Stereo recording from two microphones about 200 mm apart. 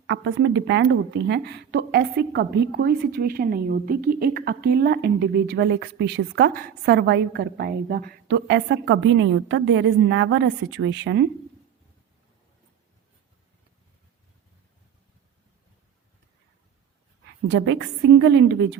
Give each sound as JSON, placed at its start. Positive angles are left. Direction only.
{"t": 0.1, "sound": "a woman's voice", "side_deg": -70}
{"t": 17.5, "sound": "a woman's voice", "side_deg": -65}